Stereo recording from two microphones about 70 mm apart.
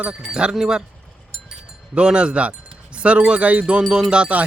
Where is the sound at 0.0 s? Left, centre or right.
Centre.